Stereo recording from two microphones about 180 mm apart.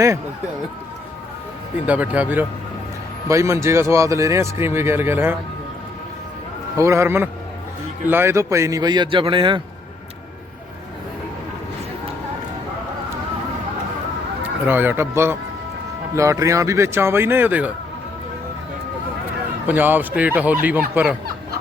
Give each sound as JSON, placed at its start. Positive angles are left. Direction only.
{"t": 1.9, "sound": "speech", "side_deg": -10}
{"t": 6.7, "sound": "speech", "side_deg": -15}
{"t": 14.4, "sound": "speech", "side_deg": -10}
{"t": 19.6, "sound": "speech", "side_deg": -10}